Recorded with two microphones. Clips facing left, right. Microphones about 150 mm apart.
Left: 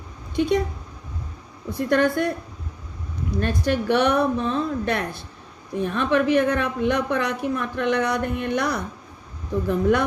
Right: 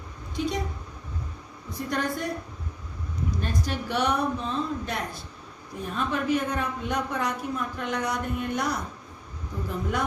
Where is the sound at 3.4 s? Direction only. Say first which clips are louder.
Left 10 dB; 65° left (ahead or behind).